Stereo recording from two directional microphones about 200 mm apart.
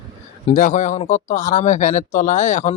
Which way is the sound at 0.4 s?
40° left (ahead or behind).